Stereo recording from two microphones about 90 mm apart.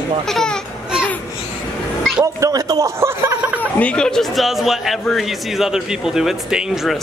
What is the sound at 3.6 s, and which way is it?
A man's voice, 15° left (ahead or behind).